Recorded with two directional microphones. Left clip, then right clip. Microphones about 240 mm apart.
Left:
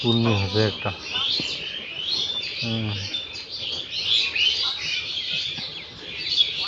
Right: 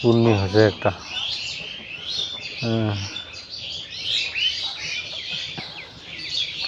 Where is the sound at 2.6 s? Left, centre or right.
Right.